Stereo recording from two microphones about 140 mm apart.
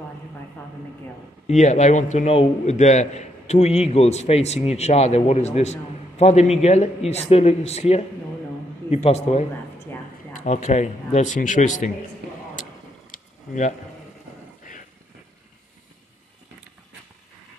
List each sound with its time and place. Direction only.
1.5 s a man's voice: 60° left (ahead or behind)
13.1 s a sound: 60° left (ahead or behind)
14.7 s vehicle: 70° left (ahead or behind)